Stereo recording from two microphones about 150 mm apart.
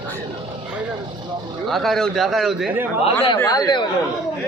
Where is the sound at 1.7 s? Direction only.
Centre (ahead or behind).